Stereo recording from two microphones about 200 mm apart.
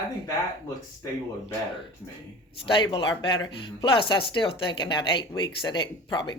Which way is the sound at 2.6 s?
25° left (ahead or behind).